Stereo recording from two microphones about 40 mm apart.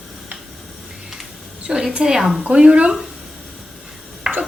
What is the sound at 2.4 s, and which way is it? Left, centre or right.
Speech, right.